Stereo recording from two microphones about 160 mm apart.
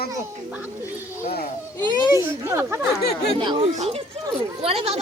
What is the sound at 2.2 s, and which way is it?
Speech, 15° right (ahead or behind).